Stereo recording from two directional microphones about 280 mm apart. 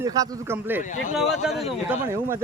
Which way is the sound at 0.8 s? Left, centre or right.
Left.